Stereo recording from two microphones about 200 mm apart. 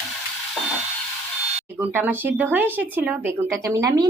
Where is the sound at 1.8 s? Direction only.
10° right (ahead or behind).